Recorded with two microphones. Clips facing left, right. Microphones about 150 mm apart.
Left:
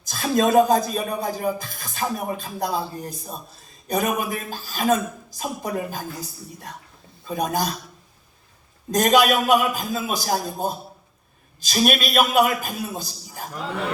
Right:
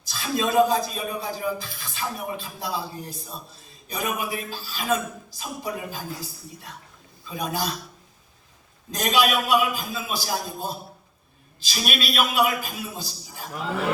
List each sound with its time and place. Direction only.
0.0 s speech: 45° left (ahead or behind)
7.3 s speech: 45° left (ahead or behind)
8.9 s speech: 45° left (ahead or behind)
13.5 s speech: 5° right (ahead or behind)